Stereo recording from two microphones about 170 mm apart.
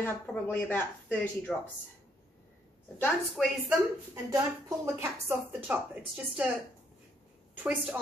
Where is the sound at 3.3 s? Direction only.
Centre (ahead or behind).